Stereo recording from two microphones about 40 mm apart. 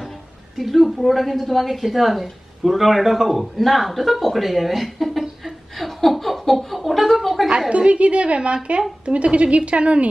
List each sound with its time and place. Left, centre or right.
0.6 s a woman's voice: centre
5.4 s a sound: centre
7.7 s a woman's voice: right